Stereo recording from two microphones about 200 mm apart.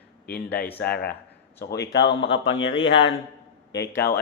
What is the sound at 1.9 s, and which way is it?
A man's voice, 60° left (ahead or behind).